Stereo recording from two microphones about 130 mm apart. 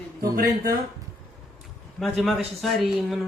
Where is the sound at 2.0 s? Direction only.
Centre (ahead or behind).